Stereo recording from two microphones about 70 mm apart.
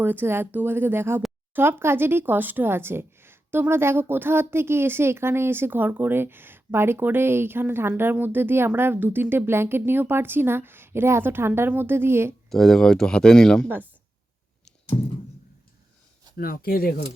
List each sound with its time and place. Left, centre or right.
0.0 s speech: right
12.5 s speech: centre